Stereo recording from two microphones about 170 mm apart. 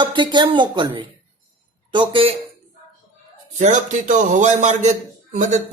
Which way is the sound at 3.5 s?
45° right (ahead or behind).